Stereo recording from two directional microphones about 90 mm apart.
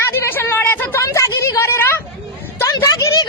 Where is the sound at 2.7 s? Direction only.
40° left (ahead or behind).